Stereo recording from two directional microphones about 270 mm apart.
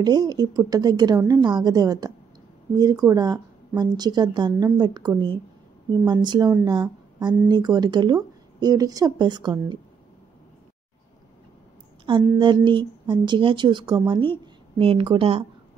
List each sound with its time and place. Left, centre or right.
0.0 s speech: centre
12.1 s a woman's voice: centre